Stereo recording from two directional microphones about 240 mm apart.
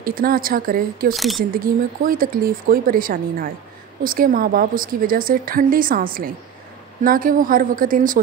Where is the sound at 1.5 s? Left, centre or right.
Right.